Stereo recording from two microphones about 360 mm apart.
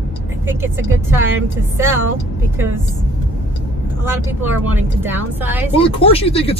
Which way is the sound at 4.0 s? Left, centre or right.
Centre.